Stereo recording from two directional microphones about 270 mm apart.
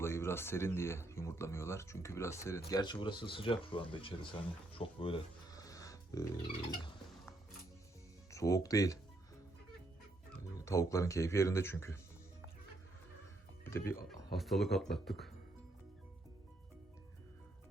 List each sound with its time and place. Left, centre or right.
0.0 s speech: centre
6.7 s music: centre
8.3 s speech: centre
10.7 s speech: centre
13.7 s speech: centre